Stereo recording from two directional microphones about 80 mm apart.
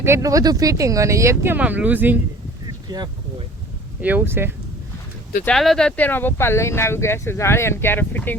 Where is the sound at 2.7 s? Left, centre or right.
Right.